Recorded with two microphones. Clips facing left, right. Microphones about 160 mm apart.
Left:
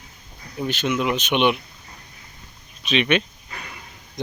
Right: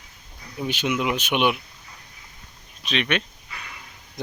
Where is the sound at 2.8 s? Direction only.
Centre (ahead or behind).